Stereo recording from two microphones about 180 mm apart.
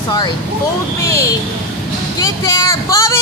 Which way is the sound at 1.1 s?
15° left (ahead or behind).